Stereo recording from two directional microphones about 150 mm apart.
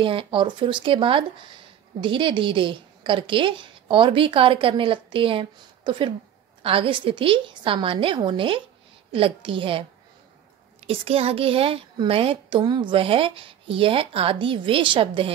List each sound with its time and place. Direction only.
0.0 s a woman's voice: 35° right (ahead or behind)
10.9 s a woman's voice: 40° right (ahead or behind)